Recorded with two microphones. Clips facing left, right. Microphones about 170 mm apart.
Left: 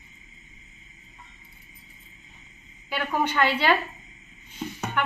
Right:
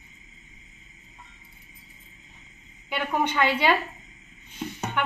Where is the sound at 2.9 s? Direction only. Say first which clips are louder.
Even; 15° right (ahead or behind).